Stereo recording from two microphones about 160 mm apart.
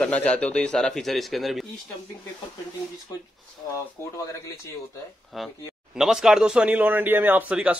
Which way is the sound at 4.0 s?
15° left (ahead or behind).